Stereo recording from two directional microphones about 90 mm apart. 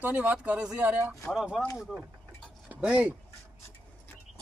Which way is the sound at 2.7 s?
10° right (ahead or behind).